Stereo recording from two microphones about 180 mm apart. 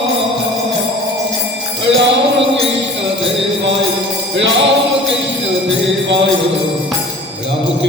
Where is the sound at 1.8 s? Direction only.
90° right.